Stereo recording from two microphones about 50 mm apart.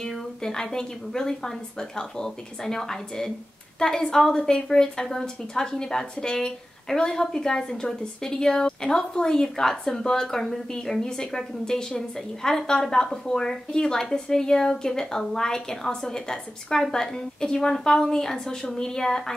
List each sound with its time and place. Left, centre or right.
0.0 s a woman's voice: centre